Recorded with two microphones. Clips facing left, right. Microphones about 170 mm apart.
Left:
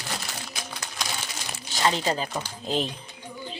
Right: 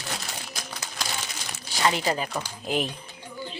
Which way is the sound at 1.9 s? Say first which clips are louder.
Even; 30° left (ahead or behind).